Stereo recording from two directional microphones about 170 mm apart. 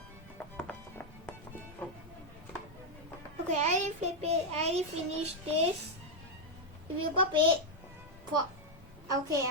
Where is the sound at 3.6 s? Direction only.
40° right (ahead or behind).